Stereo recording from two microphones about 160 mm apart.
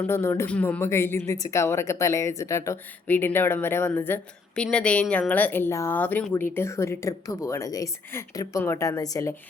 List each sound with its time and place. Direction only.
0.0 s speech: 15° left (ahead or behind)